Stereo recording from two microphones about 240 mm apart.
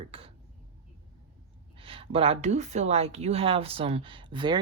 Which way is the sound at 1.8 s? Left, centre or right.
Right.